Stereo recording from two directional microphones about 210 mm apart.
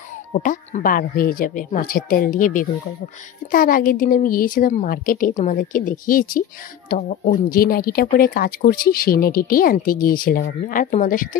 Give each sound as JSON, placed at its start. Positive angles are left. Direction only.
{"t": 0.4, "sound": "a woman's voice", "side_deg": 40}